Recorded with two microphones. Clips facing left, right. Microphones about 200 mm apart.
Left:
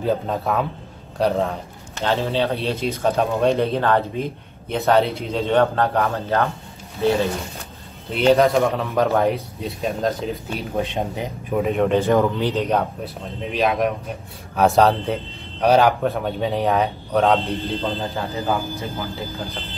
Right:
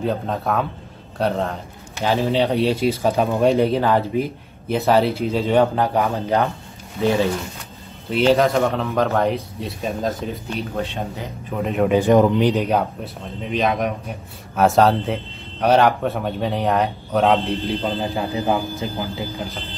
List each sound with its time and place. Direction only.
0.0 s a man's voice: centre (ahead or behind)
2.0 s speech: 15° right (ahead or behind)
5.6 s speech: 15° right (ahead or behind)
8.1 s a man's voice: centre (ahead or behind)
10.8 s a man's voice: 15° left (ahead or behind)
11.6 s a man's voice: centre (ahead or behind)
12.0 s a man's voice: 15° right (ahead or behind)
17.6 s speech: 15° right (ahead or behind)